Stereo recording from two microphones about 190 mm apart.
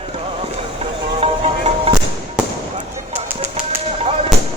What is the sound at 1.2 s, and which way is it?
Music, 30° right (ahead or behind).